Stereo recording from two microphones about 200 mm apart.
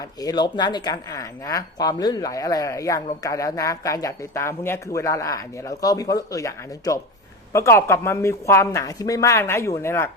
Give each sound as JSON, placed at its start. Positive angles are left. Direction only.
{"t": 0.0, "sound": "speech", "side_deg": 20}